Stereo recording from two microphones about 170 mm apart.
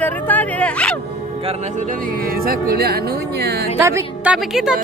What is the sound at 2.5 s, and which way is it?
Speech, 65° right (ahead or behind).